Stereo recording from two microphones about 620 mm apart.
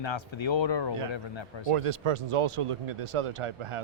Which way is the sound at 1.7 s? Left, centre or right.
Right.